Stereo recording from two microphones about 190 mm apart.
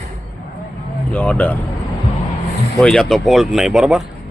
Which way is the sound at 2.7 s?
5° left (ahead or behind).